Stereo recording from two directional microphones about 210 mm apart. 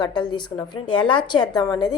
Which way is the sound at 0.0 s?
20° left (ahead or behind).